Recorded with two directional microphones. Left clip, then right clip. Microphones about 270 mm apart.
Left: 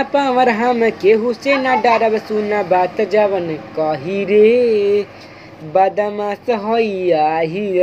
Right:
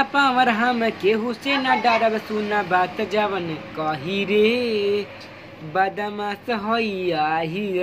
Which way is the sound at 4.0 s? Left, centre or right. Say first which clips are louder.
Left 7 dB; centre.